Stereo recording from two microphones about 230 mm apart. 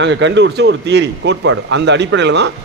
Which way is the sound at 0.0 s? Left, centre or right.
Right.